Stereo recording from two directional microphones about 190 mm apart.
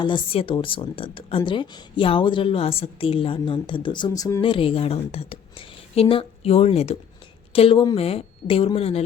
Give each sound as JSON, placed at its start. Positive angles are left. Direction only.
{"t": 0.0, "sound": "speech", "side_deg": 25}